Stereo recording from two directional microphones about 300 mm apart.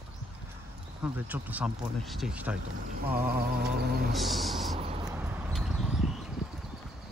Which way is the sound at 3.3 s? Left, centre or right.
Right.